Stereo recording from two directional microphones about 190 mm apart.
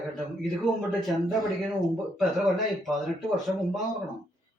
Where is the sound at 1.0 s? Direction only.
Centre (ahead or behind).